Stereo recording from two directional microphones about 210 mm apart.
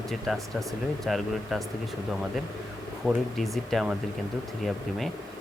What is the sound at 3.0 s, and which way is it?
Speech, centre (ahead or behind).